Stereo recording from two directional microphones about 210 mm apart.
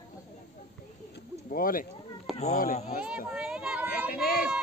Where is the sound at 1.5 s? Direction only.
40° left (ahead or behind).